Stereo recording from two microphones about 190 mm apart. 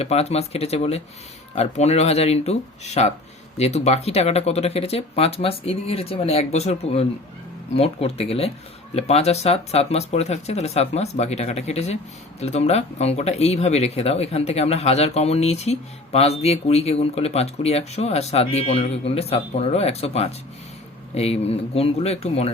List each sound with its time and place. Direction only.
0.0 s speech: 35° left (ahead or behind)